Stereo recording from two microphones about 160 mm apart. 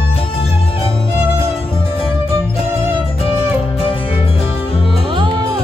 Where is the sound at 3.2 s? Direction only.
35° left (ahead or behind).